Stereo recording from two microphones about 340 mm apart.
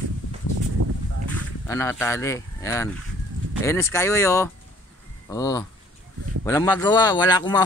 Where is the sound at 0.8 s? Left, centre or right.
Right.